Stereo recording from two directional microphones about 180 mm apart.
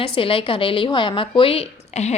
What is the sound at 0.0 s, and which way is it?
A woman's voice, 30° left (ahead or behind).